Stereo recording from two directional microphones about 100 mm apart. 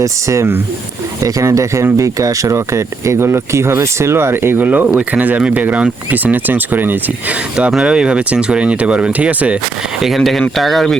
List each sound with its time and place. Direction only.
0.0 s speech: 30° right (ahead or behind)
7.5 s speech: 5° right (ahead or behind)
10.0 s speech: centre (ahead or behind)